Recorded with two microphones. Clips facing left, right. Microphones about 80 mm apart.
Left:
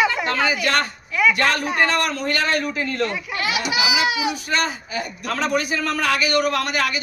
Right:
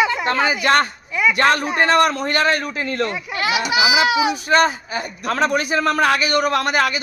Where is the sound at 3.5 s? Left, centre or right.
Right.